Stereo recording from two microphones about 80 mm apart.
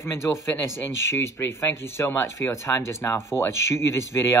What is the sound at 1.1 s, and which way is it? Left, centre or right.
Speech, left.